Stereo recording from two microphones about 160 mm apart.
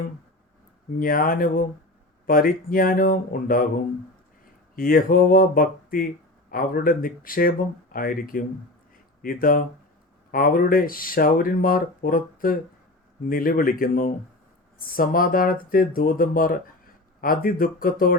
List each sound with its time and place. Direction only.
0.9 s speech: 60° left (ahead or behind)
4.7 s speech: 60° left (ahead or behind)